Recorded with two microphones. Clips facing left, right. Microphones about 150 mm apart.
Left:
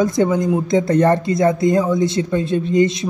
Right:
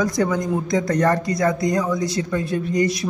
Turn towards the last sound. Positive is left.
turn(degrees=25)  # may be behind; listen again after turning